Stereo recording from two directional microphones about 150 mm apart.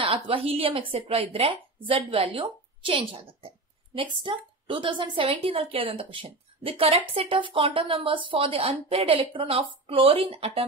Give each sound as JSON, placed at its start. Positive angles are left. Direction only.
{"t": 0.0, "sound": "a woman's voice", "side_deg": -40}